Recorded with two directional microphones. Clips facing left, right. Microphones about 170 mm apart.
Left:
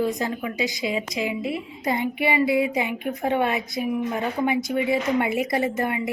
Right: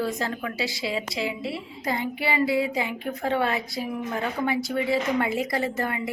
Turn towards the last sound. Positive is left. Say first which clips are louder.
# left 3 dB
turn(degrees=20)  # may be behind; listen again after turning